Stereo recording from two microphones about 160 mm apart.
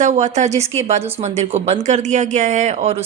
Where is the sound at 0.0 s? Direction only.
50° right (ahead or behind).